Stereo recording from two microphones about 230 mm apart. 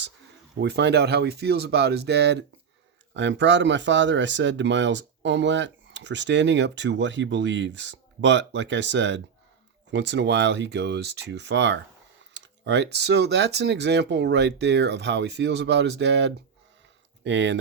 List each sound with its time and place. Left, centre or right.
0.6 s speech: right